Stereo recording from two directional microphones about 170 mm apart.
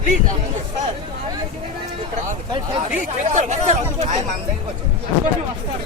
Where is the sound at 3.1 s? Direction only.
45° right (ahead or behind).